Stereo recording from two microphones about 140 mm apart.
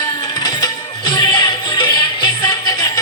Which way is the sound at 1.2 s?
30° left (ahead or behind).